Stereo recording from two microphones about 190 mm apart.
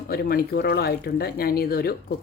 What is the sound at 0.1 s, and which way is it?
Speech, 50° left (ahead or behind).